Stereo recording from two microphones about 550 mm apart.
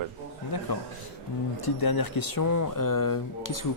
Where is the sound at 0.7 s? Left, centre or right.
Left.